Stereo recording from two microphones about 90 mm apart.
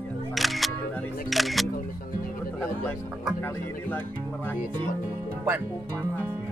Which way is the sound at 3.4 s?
20° left (ahead or behind).